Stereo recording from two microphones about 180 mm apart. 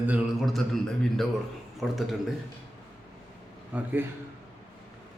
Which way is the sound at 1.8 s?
Centre (ahead or behind).